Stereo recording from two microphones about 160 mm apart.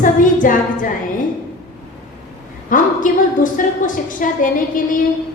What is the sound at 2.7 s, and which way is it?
A woman's voice, 55° left (ahead or behind).